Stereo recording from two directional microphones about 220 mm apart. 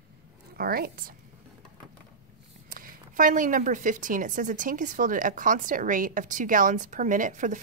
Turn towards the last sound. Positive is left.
turn(degrees=-35)  # may be behind; listen again after turning